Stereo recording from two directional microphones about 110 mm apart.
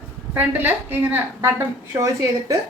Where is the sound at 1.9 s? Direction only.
30° right (ahead or behind).